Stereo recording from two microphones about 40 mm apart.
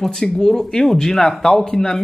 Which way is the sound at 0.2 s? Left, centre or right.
Centre.